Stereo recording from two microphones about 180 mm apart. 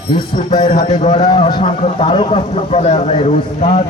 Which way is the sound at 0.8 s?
25° left (ahead or behind).